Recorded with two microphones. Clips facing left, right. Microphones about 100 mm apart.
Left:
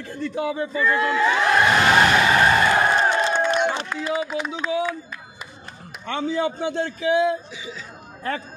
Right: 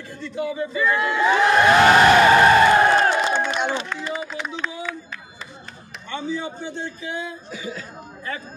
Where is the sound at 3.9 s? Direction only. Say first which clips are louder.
Left 4 dB; 10° left (ahead or behind).